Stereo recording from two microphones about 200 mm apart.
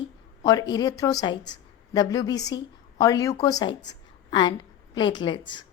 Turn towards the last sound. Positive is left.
turn(degrees=25)  # may be behind; listen again after turning